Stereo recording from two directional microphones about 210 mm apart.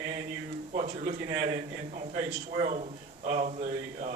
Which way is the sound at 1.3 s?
35° right (ahead or behind).